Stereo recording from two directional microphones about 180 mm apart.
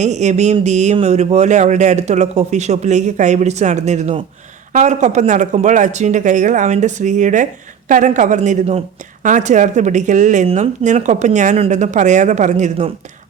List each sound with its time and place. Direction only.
0.0 s speech: 40° right (ahead or behind)